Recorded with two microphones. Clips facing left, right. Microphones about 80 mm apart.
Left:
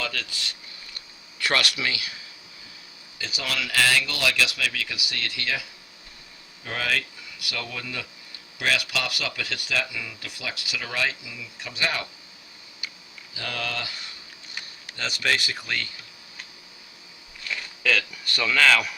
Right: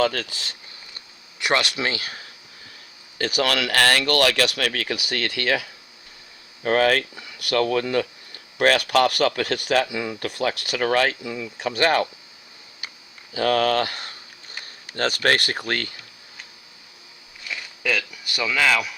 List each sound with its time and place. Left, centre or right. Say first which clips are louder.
0.0 s speech: right 10 dB; right
0.9 s speech: left 2 dB; right
3.2 s speech: right 9 dB; right
13.3 s speech: right 13 dB; right
18.1 s speech: even; centre